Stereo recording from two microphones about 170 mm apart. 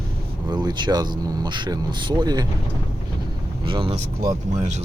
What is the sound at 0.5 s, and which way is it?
Speech, 25° right (ahead or behind).